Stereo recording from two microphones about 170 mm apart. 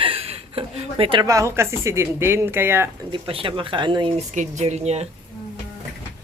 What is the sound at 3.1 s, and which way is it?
Speech, 30° right (ahead or behind).